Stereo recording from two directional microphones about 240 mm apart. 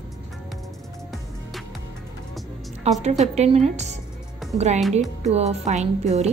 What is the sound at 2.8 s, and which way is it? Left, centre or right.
A woman's voice, right.